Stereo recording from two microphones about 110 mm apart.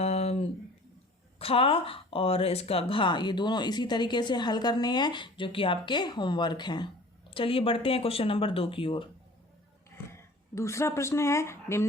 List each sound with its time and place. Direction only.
0.0 s a sound: 70° left (ahead or behind)
1.4 s speech: 60° left (ahead or behind)
10.1 s speech: 25° left (ahead or behind)